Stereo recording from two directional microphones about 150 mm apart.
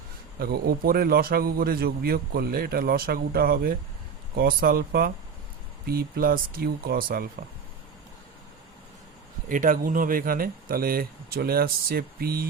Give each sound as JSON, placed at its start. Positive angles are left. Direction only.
{"t": 0.3, "sound": "a man's voice", "side_deg": -90}
{"t": 5.8, "sound": "a man's voice", "side_deg": -90}
{"t": 9.5, "sound": "a man's voice", "side_deg": -65}